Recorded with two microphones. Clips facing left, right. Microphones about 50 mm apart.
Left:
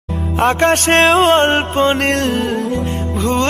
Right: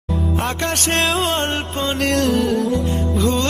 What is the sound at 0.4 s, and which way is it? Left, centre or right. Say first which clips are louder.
Music: left 14 dB; left.